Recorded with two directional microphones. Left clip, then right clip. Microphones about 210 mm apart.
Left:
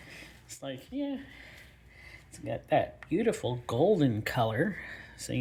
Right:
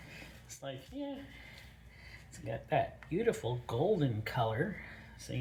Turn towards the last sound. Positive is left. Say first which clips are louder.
# left 7 dB
turn(degrees=45)  # may be behind; listen again after turning